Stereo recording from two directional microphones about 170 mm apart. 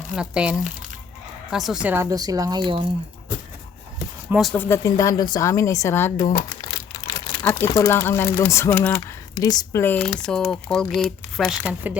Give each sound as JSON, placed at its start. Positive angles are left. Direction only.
{"t": 0.2, "sound": "speech", "side_deg": -5}
{"t": 4.3, "sound": "speech", "side_deg": 0}
{"t": 4.5, "sound": "speech", "side_deg": 15}
{"t": 7.4, "sound": "speech", "side_deg": 15}
{"t": 9.8, "sound": "speech", "side_deg": 10}